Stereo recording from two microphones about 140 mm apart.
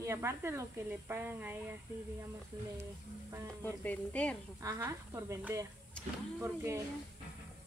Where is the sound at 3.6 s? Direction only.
10° left (ahead or behind).